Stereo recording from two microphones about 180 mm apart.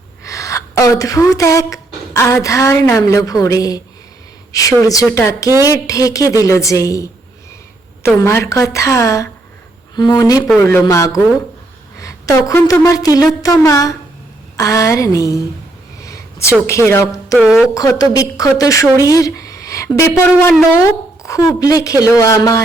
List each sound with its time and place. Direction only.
0.3 s a woman's voice: 15° left (ahead or behind)
11.9 s a sound: 20° left (ahead or behind)
12.7 s a woman's voice: 20° left (ahead or behind)
17.3 s speech: 5° right (ahead or behind)
17.7 s a woman's voice: 20° left (ahead or behind)